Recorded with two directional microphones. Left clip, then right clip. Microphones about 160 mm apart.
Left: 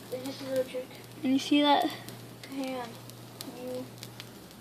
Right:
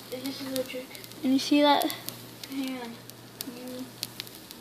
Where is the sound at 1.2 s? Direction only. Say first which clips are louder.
Right 3 dB; 5° right (ahead or behind).